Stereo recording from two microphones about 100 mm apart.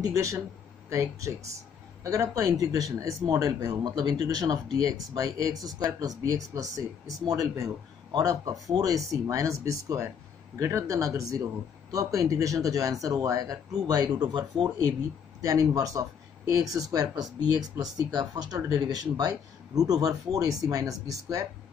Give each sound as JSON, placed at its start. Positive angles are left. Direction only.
{"t": 0.0, "sound": "speech", "side_deg": -35}